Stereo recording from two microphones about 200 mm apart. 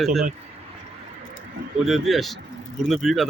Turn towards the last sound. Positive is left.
turn(degrees=0)  # may be behind; listen again after turning